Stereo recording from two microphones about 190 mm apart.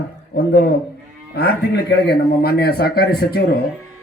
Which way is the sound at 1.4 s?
60° left (ahead or behind).